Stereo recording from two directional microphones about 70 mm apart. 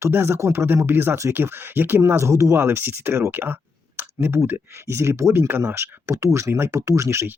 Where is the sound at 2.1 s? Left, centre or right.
Right.